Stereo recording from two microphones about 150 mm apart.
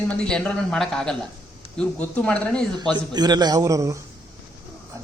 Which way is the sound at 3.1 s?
30° right (ahead or behind).